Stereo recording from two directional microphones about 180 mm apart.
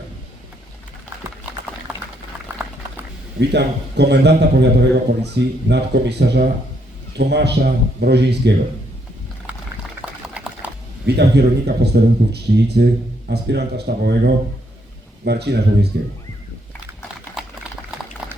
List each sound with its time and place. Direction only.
3.5 s a man's voice: 70° right (ahead or behind)
9.5 s boiling: 10° right (ahead or behind)
10.2 s a sound: 5° right (ahead or behind)
11.0 s a man's voice: 70° right (ahead or behind)
17.4 s boiling: 5° right (ahead or behind)